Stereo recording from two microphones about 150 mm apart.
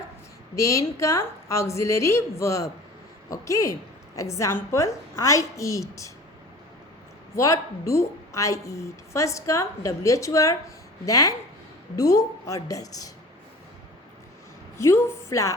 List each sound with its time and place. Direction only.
0.5 s a woman's voice: 20° left (ahead or behind)
7.3 s a woman's voice: 20° left (ahead or behind)
14.8 s a woman's voice: 20° left (ahead or behind)